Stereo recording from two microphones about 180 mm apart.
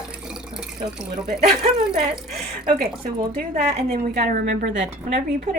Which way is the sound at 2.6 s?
55° right (ahead or behind).